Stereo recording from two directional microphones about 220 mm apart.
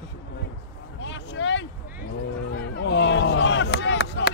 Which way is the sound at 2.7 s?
55° left (ahead or behind).